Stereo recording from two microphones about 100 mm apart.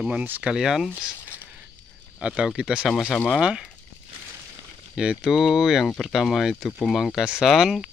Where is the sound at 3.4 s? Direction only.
5° right (ahead or behind).